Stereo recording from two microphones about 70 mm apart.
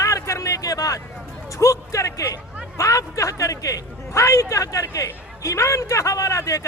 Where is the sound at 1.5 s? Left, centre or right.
Left.